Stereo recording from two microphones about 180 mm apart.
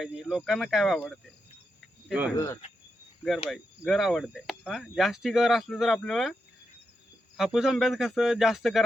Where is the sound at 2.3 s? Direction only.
15° left (ahead or behind).